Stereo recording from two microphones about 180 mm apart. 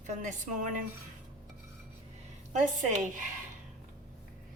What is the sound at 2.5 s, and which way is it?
Speech, 40° right (ahead or behind).